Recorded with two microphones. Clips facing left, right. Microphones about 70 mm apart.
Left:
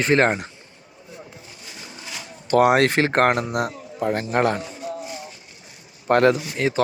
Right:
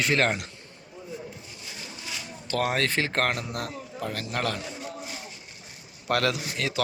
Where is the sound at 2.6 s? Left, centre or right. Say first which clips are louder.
Left 9 dB; left.